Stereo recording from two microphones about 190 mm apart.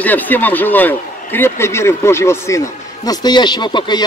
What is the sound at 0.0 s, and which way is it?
A man's voice, 10° left (ahead or behind).